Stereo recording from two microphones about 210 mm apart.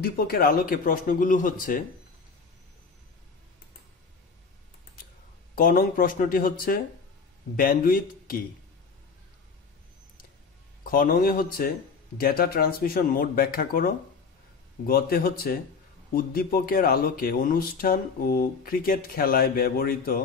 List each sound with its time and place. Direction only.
0.3 s speech: 45° left (ahead or behind)
5.6 s speech: 40° left (ahead or behind)
10.8 s speech: 40° left (ahead or behind)